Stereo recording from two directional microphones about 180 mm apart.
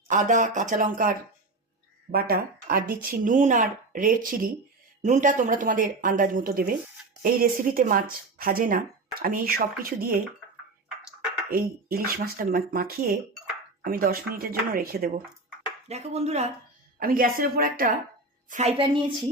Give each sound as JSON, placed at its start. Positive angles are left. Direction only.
{"t": 0.1, "sound": "speech", "side_deg": -45}
{"t": 2.1, "sound": "speech", "side_deg": -55}
{"t": 11.5, "sound": "speech", "side_deg": -55}
{"t": 15.9, "sound": "speech", "side_deg": -35}
{"t": 17.0, "sound": "speech", "side_deg": -55}
{"t": 18.4, "sound": "a woman's voice", "side_deg": -40}